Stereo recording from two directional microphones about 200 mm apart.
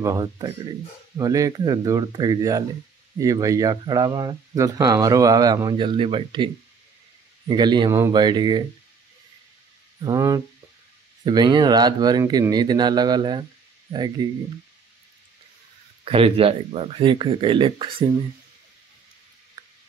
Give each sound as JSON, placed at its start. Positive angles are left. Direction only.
{"t": 0.0, "sound": "speech", "side_deg": -15}
{"t": 10.0, "sound": "speech", "side_deg": -15}
{"t": 16.0, "sound": "speech", "side_deg": -30}
{"t": 19.6, "sound": "a sound", "side_deg": -20}